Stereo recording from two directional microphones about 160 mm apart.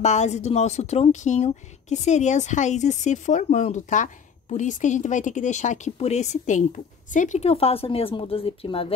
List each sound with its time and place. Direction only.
0.0 s speech: 45° left (ahead or behind)